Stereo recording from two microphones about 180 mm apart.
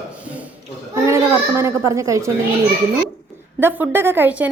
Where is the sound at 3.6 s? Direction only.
10° right (ahead or behind).